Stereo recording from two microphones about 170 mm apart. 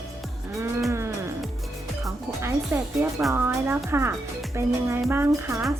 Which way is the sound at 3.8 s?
15° right (ahead or behind).